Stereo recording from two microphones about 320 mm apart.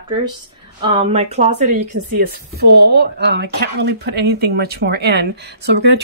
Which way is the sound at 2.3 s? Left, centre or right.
Right.